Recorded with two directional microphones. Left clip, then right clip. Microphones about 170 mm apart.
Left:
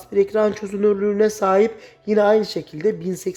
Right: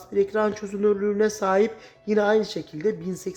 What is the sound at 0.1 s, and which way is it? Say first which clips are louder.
Speech: left 5 dB; 25° left (ahead or behind).